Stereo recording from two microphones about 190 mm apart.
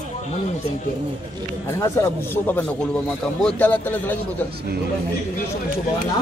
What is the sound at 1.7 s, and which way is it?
Speech, 15° left (ahead or behind).